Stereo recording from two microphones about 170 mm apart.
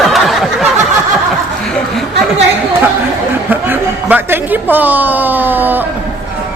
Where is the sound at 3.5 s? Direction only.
10° right (ahead or behind).